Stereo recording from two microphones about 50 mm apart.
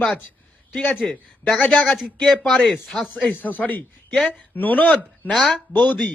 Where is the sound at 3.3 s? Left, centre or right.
Left.